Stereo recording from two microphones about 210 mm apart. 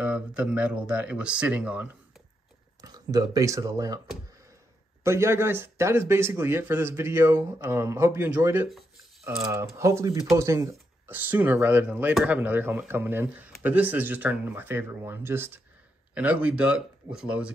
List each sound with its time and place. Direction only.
0.0 s speech: 5° right (ahead or behind)
2.8 s speech: 15° right (ahead or behind)
5.0 s speech: 15° right (ahead or behind)